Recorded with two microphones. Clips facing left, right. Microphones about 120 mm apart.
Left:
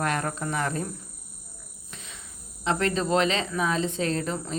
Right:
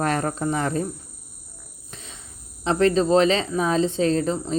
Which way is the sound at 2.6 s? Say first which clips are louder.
Right 7 dB; 35° right (ahead or behind).